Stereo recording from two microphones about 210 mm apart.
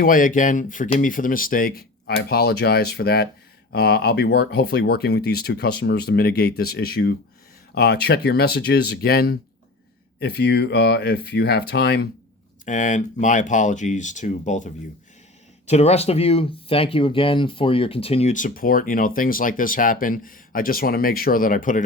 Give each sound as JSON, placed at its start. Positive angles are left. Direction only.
{"t": 0.0, "sound": "speech", "side_deg": 40}
{"t": 12.6, "sound": "speech", "side_deg": 35}